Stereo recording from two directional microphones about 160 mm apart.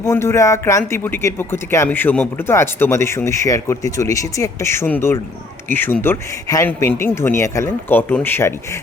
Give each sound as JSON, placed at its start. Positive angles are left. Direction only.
{"t": 0.0, "sound": "a man's voice", "side_deg": 15}